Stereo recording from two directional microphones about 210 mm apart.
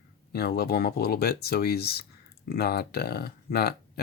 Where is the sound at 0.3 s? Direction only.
50° left (ahead or behind).